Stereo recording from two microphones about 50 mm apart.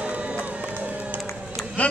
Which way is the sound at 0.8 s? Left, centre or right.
Right.